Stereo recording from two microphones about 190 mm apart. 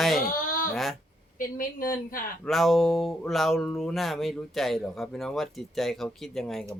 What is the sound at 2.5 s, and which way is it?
Speech, centre (ahead or behind).